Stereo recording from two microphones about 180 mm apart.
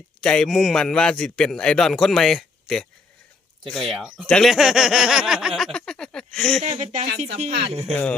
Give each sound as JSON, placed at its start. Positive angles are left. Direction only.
{"t": 0.2, "sound": "speech", "side_deg": 5}
{"t": 6.6, "sound": "speech", "side_deg": -40}
{"t": 7.9, "sound": "speech", "side_deg": 5}